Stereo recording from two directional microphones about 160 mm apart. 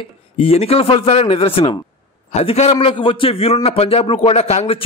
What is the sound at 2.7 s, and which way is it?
A man's voice, 30° left (ahead or behind).